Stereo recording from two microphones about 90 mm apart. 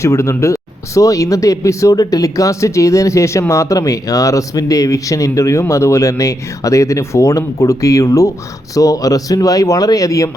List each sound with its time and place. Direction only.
0.0 s speech: 35° left (ahead or behind)